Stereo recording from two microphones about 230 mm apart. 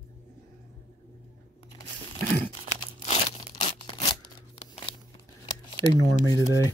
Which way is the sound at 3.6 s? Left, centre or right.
Left.